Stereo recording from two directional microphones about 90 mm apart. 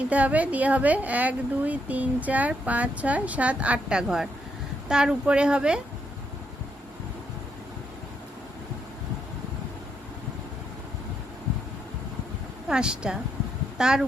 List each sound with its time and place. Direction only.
0.1 s speech: 15° right (ahead or behind)
12.6 s speech: 10° right (ahead or behind)